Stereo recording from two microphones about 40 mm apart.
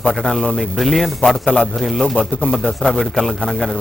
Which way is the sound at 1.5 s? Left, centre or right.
Left.